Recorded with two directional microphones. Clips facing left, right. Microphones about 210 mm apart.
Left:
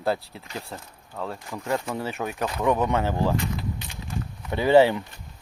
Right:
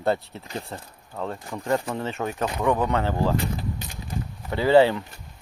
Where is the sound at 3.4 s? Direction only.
40° right (ahead or behind).